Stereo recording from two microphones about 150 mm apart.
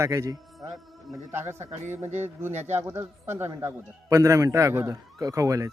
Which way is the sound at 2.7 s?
15° right (ahead or behind).